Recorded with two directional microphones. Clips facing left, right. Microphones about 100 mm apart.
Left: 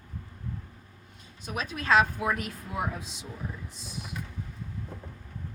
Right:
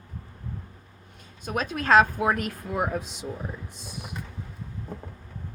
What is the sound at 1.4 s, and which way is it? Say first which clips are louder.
Speech: right 4 dB; 45° right (ahead or behind).